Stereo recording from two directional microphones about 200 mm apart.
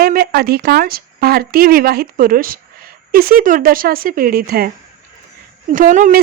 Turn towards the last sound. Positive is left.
turn(degrees=-40)  # may be behind; listen again after turning